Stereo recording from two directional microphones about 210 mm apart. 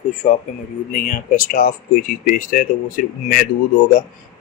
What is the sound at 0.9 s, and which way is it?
Speech, 40° left (ahead or behind).